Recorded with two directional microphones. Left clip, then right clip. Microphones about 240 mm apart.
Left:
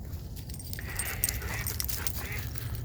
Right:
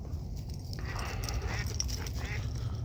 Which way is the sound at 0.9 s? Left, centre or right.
Right.